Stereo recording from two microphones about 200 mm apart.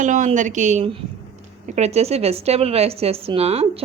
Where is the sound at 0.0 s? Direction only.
40° right (ahead or behind).